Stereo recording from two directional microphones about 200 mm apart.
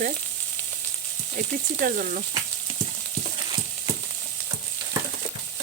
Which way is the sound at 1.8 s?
40° right (ahead or behind).